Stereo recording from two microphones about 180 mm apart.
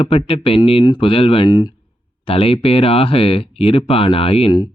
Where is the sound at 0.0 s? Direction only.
30° left (ahead or behind).